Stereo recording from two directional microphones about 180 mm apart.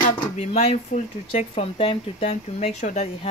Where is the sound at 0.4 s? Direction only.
40° left (ahead or behind).